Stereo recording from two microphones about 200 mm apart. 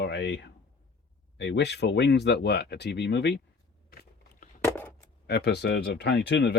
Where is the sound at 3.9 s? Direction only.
50° left (ahead or behind).